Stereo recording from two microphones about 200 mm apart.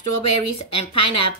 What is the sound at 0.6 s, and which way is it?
Speech, 30° left (ahead or behind).